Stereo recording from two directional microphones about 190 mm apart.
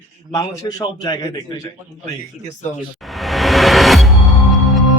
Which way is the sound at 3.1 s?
Centre (ahead or behind).